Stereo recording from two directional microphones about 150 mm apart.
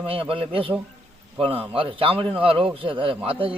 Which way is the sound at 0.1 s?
35° right (ahead or behind).